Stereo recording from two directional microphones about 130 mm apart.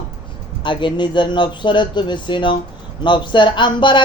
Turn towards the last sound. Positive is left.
turn(degrees=40)  # may be behind; listen again after turning